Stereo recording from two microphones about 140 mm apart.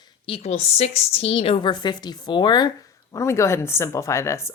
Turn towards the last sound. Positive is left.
turn(degrees=20)  # may be behind; listen again after turning